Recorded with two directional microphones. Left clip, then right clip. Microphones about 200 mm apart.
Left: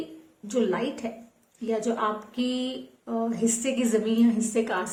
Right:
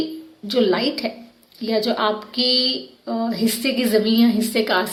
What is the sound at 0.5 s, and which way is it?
A woman's voice, 40° right (ahead or behind).